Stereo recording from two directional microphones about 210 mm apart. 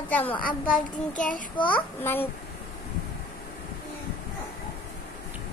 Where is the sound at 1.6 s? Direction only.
10° left (ahead or behind).